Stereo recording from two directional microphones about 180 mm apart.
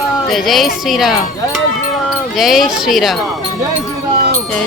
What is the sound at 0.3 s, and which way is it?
Speech, centre (ahead or behind).